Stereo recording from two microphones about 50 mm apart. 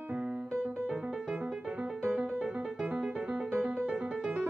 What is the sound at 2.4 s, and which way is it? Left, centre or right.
Music, right.